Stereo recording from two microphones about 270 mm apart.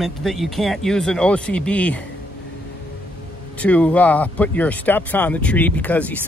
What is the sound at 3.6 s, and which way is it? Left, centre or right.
Speech, centre.